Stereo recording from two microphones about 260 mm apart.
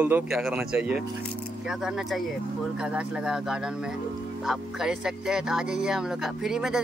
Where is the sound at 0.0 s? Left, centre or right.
Centre.